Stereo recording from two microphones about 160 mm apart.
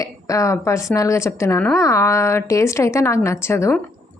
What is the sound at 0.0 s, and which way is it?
A woman's voice, 20° left (ahead or behind).